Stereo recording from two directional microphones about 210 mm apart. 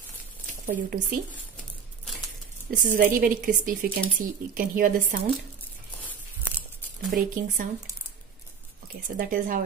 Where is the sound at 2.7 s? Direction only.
40° right (ahead or behind).